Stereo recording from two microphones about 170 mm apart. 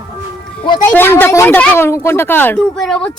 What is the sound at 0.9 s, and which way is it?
Speech, 10° left (ahead or behind).